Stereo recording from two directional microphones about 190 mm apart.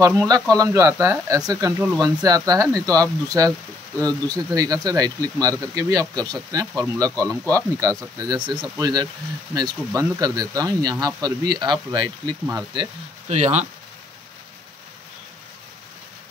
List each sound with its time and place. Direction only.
0.0 s speech: 15° right (ahead or behind)
13.3 s speech: 35° right (ahead or behind)